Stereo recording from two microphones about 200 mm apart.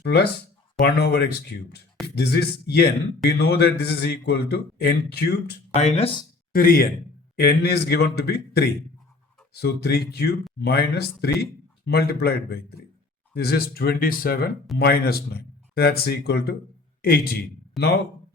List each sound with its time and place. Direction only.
0.0 s a man's voice: 55° left (ahead or behind)
5.7 s speech: 35° left (ahead or behind)
6.5 s a man's voice: 45° left (ahead or behind)